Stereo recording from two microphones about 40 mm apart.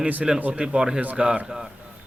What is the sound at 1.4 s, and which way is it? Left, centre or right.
Speech, centre.